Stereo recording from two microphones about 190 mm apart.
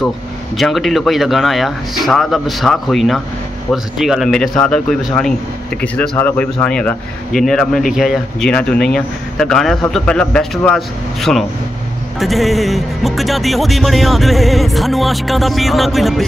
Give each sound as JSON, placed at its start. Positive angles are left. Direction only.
{"t": 0.6, "sound": "speech", "side_deg": 0}